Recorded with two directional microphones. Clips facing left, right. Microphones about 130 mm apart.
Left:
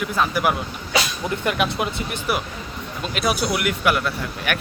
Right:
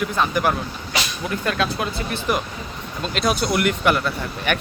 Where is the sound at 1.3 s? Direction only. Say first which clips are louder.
Right 1 dB; 20° left (ahead or behind).